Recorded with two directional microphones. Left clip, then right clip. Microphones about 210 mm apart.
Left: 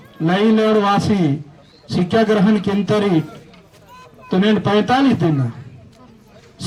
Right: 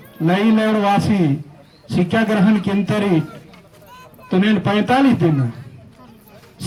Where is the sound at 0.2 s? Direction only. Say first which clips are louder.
Left 1 dB; 25° left (ahead or behind).